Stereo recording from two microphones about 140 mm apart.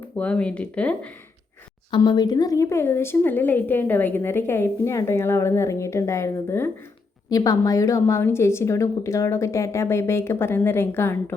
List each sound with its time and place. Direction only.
0.2 s a woman's voice: 10° left (ahead or behind)
2.0 s a woman's voice: 30° left (ahead or behind)